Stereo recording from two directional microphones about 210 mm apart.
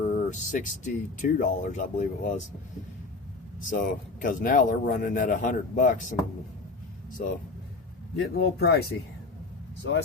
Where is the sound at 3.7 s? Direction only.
40° left (ahead or behind).